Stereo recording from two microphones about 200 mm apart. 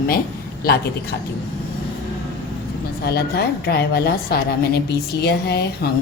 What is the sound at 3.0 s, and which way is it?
A woman's voice, 55° left (ahead or behind).